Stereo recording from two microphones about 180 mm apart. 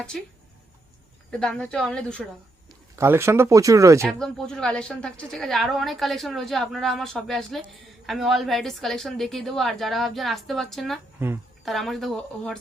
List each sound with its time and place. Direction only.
1.3 s a woman's voice: 5° left (ahead or behind)
2.9 s speech: 15° right (ahead or behind)
4.0 s a woman's voice: 5° left (ahead or behind)